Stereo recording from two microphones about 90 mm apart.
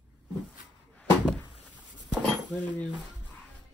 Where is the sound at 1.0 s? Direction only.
15° left (ahead or behind).